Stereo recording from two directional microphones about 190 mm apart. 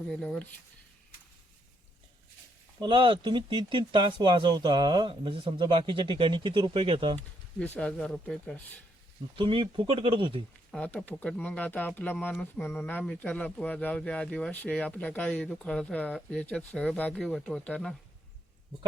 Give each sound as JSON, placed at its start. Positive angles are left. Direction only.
{"t": 0.1, "sound": "speech", "side_deg": 5}
{"t": 2.8, "sound": "speech", "side_deg": -25}
{"t": 7.6, "sound": "speech", "side_deg": 5}
{"t": 9.3, "sound": "speech", "side_deg": -25}
{"t": 10.7, "sound": "speech", "side_deg": 5}